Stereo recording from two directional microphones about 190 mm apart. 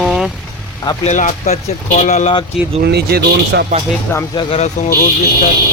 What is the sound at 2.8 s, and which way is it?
Speech, 55° right (ahead or behind).